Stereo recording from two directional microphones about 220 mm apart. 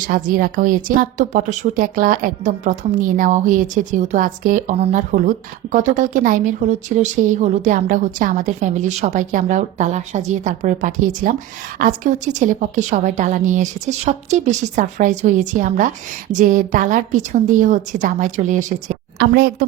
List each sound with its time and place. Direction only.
0.0 s a woman's voice: 40° right (ahead or behind)